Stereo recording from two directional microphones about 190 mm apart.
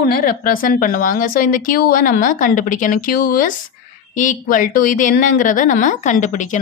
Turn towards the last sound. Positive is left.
turn(degrees=40)  # may be behind; listen again after turning